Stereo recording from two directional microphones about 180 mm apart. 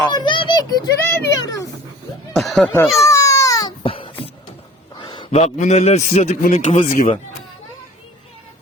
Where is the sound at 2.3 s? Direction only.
Centre (ahead or behind).